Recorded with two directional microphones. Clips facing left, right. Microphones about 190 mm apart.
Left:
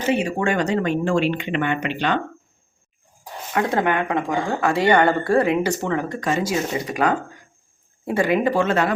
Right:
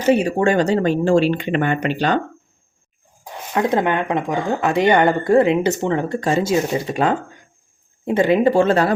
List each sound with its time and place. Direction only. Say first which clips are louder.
0.1 s speech: right 6 dB; 35° right (ahead or behind)
3.5 s speech: right 2 dB; 20° right (ahead or behind)